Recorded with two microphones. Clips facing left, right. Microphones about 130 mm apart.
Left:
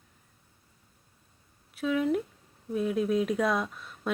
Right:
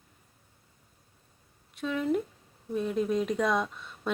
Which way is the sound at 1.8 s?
5° left (ahead or behind).